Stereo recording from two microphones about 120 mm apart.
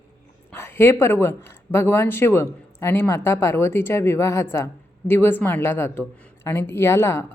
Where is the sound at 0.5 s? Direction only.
20° left (ahead or behind).